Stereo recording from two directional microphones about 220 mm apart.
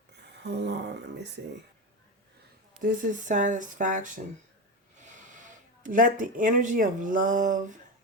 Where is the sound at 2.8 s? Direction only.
35° right (ahead or behind).